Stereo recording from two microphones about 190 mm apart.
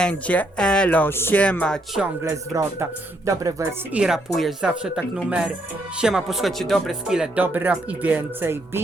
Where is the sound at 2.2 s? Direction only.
15° right (ahead or behind).